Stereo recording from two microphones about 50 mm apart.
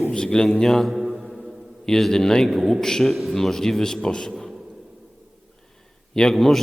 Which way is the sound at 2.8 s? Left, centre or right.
Centre.